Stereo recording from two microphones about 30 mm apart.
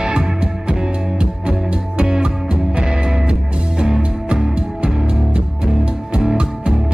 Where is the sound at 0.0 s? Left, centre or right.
Right.